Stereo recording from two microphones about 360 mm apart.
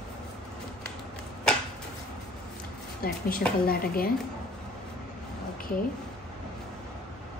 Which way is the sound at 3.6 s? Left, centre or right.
Left.